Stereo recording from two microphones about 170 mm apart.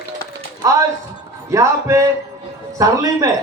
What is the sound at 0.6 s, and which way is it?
Speech, 20° right (ahead or behind).